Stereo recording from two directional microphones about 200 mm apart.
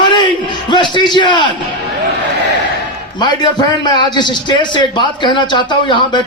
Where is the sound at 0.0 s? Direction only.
25° left (ahead or behind).